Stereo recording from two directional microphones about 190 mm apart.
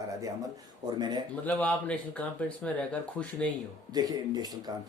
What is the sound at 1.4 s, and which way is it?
Speech, 5° left (ahead or behind).